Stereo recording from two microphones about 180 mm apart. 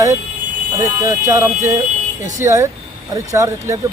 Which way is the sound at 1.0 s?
15° right (ahead or behind).